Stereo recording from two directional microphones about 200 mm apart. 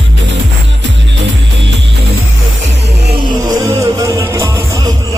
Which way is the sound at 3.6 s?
15° right (ahead or behind).